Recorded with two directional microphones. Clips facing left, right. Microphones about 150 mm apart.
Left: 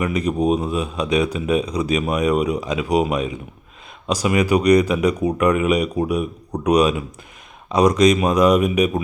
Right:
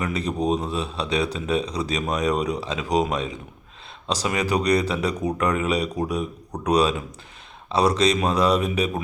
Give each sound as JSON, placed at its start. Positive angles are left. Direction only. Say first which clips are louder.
{"t": 0.0, "sound": "speech", "louder": "left 5 dB", "side_deg": 10}